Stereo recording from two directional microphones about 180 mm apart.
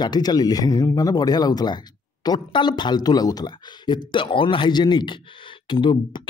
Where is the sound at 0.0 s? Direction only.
20° left (ahead or behind).